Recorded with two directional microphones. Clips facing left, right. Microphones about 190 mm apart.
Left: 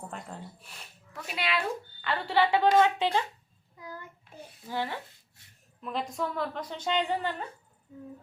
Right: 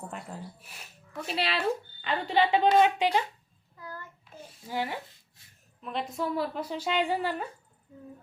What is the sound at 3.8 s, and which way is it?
Child singing, 15° left (ahead or behind).